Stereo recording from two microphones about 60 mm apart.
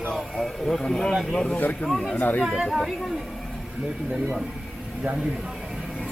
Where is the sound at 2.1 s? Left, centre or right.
Left.